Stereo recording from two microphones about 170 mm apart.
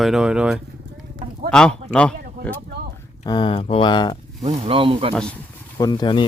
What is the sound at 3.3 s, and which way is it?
Speech, 30° left (ahead or behind).